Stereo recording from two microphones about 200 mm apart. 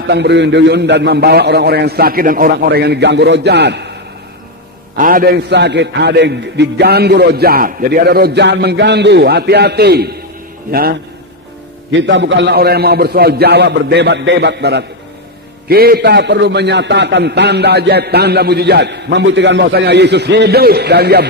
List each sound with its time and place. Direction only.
0.1 s a man's voice: 60° right (ahead or behind)
4.9 s a man's voice: 45° right (ahead or behind)
11.9 s a man's voice: 65° right (ahead or behind)